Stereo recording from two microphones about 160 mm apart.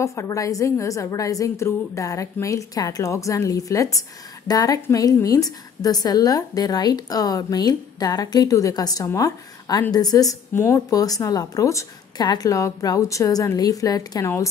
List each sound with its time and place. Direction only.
0.0 s a woman's voice: 20° left (ahead or behind)